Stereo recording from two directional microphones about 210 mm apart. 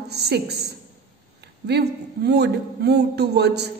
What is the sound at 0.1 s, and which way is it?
Speech, 50° right (ahead or behind).